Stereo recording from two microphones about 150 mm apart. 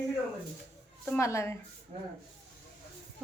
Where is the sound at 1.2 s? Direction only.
20° left (ahead or behind).